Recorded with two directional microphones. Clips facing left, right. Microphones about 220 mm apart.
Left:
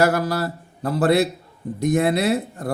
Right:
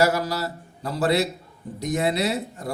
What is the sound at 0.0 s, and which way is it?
Speech, 55° left (ahead or behind).